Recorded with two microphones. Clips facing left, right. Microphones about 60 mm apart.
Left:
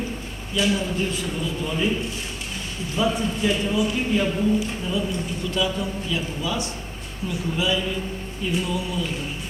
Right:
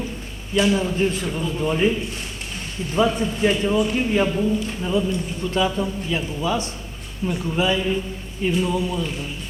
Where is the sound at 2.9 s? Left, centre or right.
Right.